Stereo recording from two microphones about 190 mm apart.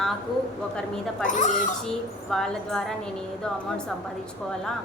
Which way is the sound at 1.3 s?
40° left (ahead or behind).